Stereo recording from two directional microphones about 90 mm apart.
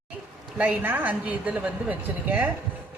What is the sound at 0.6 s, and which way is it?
A woman's voice, 20° right (ahead or behind).